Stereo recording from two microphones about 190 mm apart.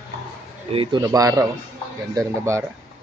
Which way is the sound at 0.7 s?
25° right (ahead or behind).